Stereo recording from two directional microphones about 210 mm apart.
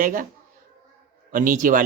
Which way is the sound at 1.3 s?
40° right (ahead or behind).